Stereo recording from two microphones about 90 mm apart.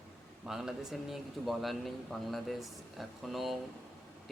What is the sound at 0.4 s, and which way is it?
Speech, 5° right (ahead or behind).